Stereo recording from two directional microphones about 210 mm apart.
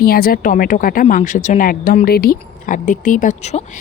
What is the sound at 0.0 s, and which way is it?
A woman's voice, 45° left (ahead or behind).